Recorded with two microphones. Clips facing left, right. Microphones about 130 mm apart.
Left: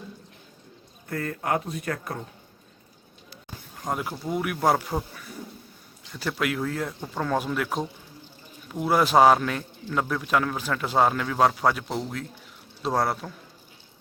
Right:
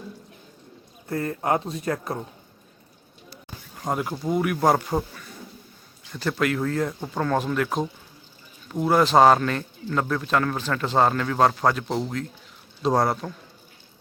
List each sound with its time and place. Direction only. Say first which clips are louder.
1.1 s speech: right 3 dB; 25° right (ahead or behind)
3.8 s speech: right 3 dB; centre (ahead or behind)
6.1 s speech: right 3 dB; 5° left (ahead or behind)
8.8 s a man's voice: right 2 dB; 10° left (ahead or behind)